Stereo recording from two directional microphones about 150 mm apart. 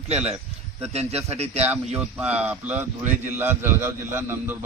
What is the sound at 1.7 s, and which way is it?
A man's voice, 10° right (ahead or behind).